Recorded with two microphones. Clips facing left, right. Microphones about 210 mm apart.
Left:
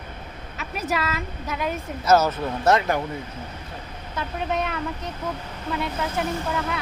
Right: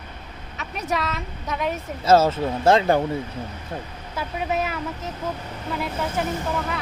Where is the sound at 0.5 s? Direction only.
Centre (ahead or behind).